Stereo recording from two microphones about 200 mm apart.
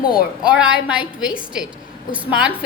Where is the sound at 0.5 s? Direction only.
5° right (ahead or behind).